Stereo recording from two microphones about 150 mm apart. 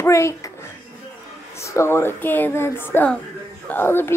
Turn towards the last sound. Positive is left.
turn(degrees=15)  # may be behind; listen again after turning